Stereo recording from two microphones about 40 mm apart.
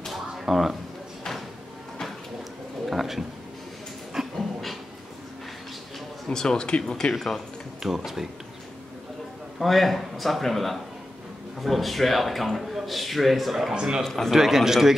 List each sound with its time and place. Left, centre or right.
0.5 s a man's voice: centre
2.9 s a sound: centre
4.4 s dog: centre
6.2 s speech: centre
7.2 s a man's voice: centre
7.8 s speech: centre
9.6 s a man's voice: centre
13.7 s speech: centre
14.0 s speech: centre
14.3 s speech: centre